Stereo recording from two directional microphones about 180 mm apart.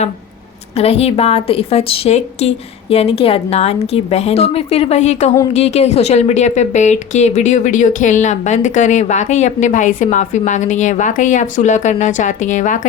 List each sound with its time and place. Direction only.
0.8 s a woman's voice: 35° left (ahead or behind)